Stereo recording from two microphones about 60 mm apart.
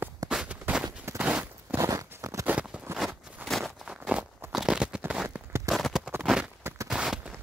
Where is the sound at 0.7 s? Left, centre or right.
Right.